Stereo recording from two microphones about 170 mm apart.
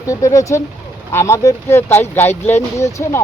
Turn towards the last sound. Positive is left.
turn(degrees=15)  # may be behind; listen again after turning